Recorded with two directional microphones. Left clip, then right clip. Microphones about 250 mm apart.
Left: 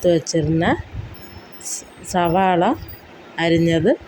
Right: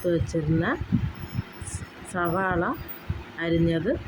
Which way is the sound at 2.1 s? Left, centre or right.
Centre.